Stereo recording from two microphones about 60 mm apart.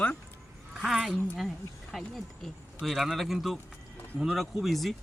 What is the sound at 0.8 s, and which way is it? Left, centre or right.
Speech, centre.